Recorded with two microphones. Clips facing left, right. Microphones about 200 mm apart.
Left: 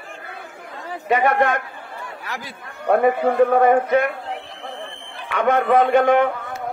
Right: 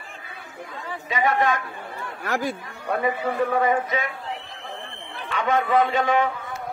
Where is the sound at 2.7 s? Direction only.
55° left (ahead or behind).